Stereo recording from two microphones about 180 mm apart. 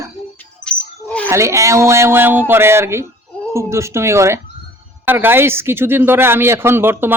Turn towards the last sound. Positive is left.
turn(degrees=-10)  # may be behind; listen again after turning